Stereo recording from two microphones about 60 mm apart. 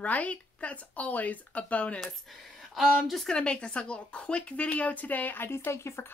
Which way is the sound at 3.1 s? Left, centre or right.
Centre.